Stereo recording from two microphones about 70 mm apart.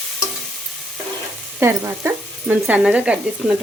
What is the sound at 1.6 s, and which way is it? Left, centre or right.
Frying, right.